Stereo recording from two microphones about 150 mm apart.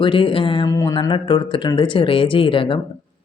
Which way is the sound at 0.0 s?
35° left (ahead or behind).